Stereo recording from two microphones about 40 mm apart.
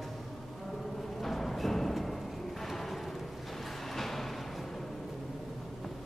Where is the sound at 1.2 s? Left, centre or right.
Centre.